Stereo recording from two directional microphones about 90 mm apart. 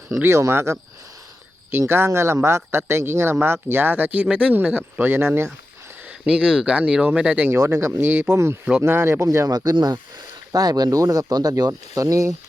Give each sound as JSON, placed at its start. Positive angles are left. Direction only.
{"t": 0.2, "sound": "speech", "side_deg": -30}
{"t": 6.2, "sound": "speech", "side_deg": -10}
{"t": 7.5, "sound": "speech", "side_deg": -30}
{"t": 10.5, "sound": "speech", "side_deg": -45}